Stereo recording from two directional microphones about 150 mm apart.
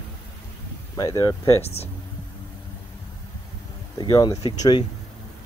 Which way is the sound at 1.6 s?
45° left (ahead or behind).